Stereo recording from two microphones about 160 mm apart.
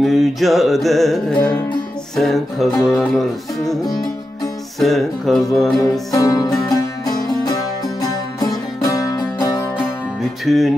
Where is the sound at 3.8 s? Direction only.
25° left (ahead or behind).